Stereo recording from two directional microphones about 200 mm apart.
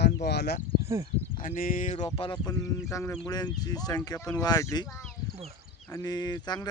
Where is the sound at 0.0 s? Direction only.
55° left (ahead or behind).